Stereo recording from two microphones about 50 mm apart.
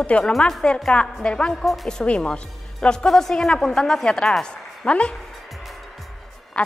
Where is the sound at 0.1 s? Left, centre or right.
Left.